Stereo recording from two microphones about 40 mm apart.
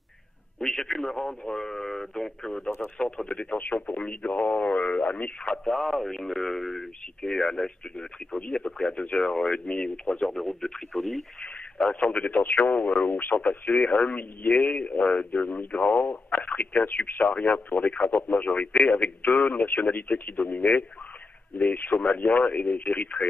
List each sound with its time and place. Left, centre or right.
0.6 s a man's voice: centre; by 3.5 s left
3.5 s speech: left
5.7 s speech: centre; by 10.2 s left
10.2 s speech: centre
11.9 s speech: left
12.2 s speech: left
14.8 s speech: left
19.3 s speech: left